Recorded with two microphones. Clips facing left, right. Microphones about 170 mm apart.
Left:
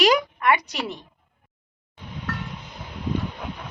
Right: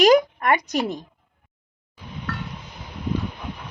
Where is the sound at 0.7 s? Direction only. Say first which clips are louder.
Right 6 dB; 45° right (ahead or behind).